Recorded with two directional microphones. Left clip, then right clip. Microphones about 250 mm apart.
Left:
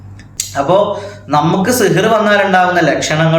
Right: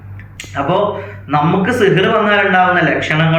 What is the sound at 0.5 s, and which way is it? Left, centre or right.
A man's voice, centre.